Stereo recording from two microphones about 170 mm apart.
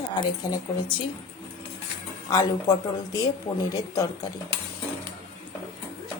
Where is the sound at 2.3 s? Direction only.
20° left (ahead or behind).